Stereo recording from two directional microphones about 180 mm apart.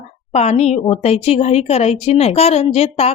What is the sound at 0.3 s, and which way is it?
A woman's voice, 35° left (ahead or behind).